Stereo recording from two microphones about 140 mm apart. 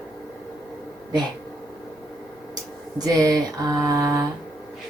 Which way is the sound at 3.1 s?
25° right (ahead or behind).